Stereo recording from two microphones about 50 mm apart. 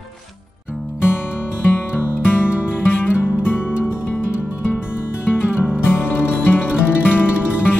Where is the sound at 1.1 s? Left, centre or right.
Left.